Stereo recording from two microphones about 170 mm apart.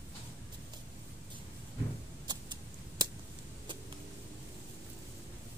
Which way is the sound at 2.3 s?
25° right (ahead or behind).